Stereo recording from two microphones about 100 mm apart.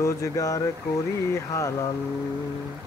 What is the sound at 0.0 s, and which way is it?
Speech, 30° left (ahead or behind).